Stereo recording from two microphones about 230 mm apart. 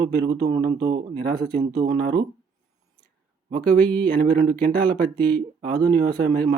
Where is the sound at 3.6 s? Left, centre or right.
Centre.